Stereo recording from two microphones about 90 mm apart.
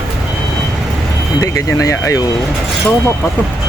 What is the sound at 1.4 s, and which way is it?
Speech, 35° left (ahead or behind).